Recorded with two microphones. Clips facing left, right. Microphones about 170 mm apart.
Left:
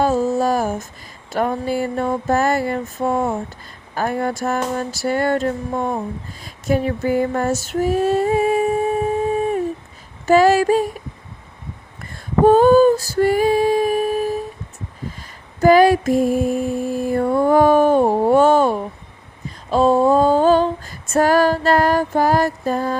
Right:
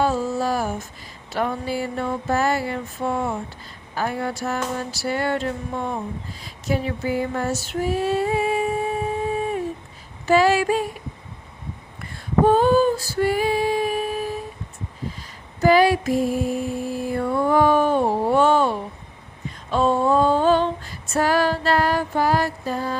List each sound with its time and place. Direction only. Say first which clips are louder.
0.0 s a sound: left 4 dB; 45° left (ahead or behind)
1.3 s mantra: left 4 dB; 45° left (ahead or behind)
10.2 s mantra: left 4 dB; 45° left (ahead or behind)
12.5 s female singing: left 7 dB; 45° left (ahead or behind)
15.6 s mantra: left 4 dB; 45° left (ahead or behind)
19.7 s female singing: left 5 dB; 40° left (ahead or behind)